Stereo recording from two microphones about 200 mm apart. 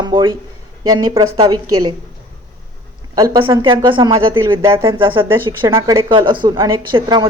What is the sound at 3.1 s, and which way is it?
Speech, 20° right (ahead or behind).